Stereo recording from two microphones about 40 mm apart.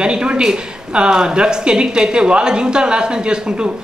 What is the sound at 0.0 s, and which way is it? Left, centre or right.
Speech, right.